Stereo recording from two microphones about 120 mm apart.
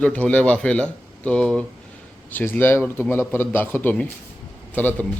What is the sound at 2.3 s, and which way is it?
A man's voice, 15° left (ahead or behind).